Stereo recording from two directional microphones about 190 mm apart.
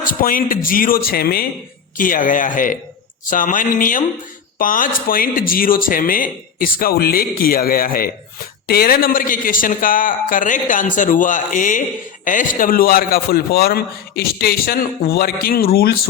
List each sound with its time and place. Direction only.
0.0 s a man's voice: 50° left (ahead or behind)